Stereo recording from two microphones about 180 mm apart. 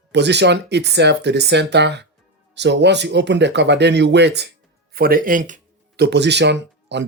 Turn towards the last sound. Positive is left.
turn(degrees=-75)  # may be behind; listen again after turning